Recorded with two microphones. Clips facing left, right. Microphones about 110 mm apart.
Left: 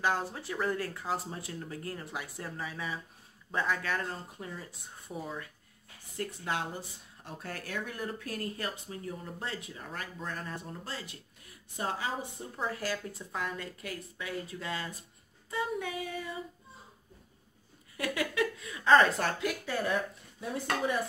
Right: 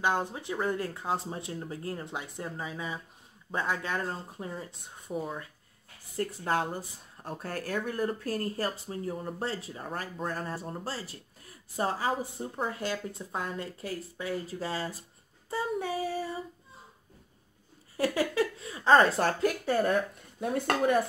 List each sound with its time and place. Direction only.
0.0 s speech: 20° right (ahead or behind)
6.1 s speech: 40° right (ahead or behind)
12.7 s speech: 25° right (ahead or behind)
17.9 s speech: 35° right (ahead or behind); by 21.0 s 55° right (ahead or behind)